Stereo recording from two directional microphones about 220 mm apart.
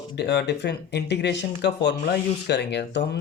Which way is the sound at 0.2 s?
50° left (ahead or behind).